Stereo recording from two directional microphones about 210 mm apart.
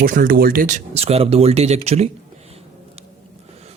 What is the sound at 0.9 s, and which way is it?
Speech, 30° right (ahead or behind).